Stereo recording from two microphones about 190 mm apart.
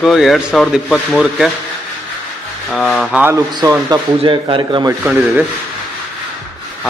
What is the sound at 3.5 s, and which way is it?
A man's voice, 20° right (ahead or behind).